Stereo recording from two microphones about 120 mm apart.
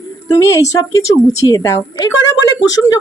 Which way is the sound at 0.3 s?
25° left (ahead or behind).